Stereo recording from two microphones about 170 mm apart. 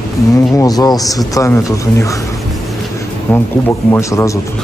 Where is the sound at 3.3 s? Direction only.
10° left (ahead or behind).